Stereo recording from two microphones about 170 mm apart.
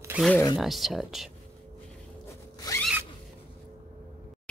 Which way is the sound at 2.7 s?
20° left (ahead or behind).